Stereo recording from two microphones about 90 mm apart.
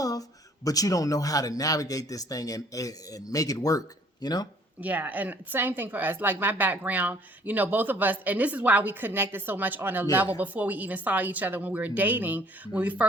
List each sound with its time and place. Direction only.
0.0 s speech: 40° left (ahead or behind)
4.8 s speech: 20° right (ahead or behind)